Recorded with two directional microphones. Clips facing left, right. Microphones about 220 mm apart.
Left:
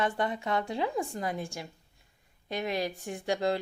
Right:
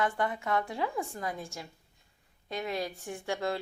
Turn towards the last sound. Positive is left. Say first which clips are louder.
# left 3 dB
turn(degrees=15)  # may be behind; listen again after turning